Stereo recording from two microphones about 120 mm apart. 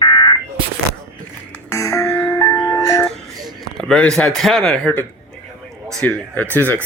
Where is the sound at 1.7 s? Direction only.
25° left (ahead or behind).